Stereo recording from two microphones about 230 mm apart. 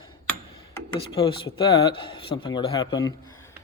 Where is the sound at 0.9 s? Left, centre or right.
Left.